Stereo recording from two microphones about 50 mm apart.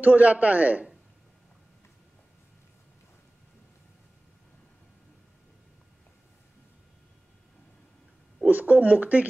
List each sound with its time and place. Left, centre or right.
0.0 s a man's voice: right
8.5 s speech: right